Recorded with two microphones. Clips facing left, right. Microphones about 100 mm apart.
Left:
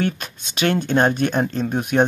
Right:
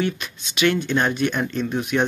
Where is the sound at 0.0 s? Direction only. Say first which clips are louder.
Left 1 dB; 45° left (ahead or behind).